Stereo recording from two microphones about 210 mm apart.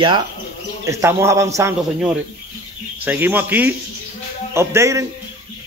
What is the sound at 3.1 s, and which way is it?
Speech, 10° right (ahead or behind).